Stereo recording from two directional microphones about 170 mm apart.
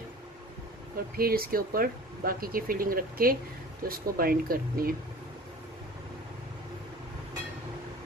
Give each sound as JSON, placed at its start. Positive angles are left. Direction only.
{"t": 1.1, "sound": "speech", "side_deg": -60}